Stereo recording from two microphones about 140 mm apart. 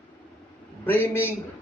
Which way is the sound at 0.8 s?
15° left (ahead or behind).